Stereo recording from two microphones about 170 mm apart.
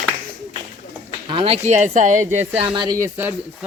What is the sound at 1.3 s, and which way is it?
Speech, 35° right (ahead or behind).